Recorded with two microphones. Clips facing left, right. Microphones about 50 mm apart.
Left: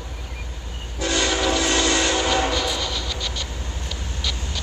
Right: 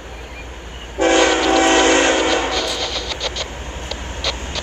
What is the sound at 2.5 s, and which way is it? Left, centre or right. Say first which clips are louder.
Vehicle: right 3 dB; right.